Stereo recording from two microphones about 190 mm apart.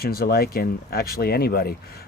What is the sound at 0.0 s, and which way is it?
Speech, 55° left (ahead or behind).